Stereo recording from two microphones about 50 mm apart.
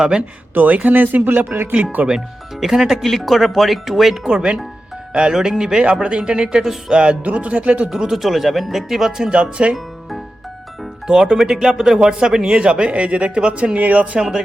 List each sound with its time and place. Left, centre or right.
0.2 s speech: right
2.0 s speech: centre
4.2 s speech: centre
7.9 s speech: centre
11.0 s speech: centre; by 14.2 s right
14.2 s speech: centre